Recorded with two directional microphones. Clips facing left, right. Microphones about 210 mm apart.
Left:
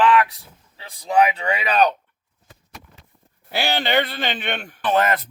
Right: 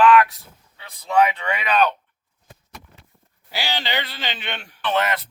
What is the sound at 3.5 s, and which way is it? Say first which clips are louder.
A man's voice: left 5 dB; 55° left (ahead or behind).